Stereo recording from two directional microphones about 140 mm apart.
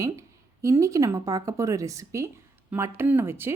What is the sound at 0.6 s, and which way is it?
Speech, 20° right (ahead or behind).